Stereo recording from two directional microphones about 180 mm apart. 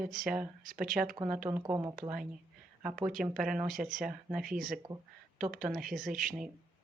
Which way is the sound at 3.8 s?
50° right (ahead or behind).